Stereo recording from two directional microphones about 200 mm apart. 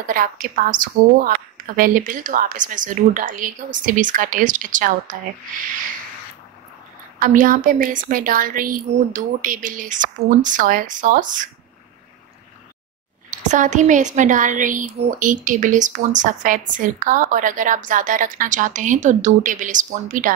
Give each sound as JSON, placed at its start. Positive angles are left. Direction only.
{"t": 0.0, "sound": "a woman's voice", "side_deg": -45}
{"t": 7.2, "sound": "a woman's voice", "side_deg": -40}
{"t": 13.4, "sound": "a woman's voice", "side_deg": -35}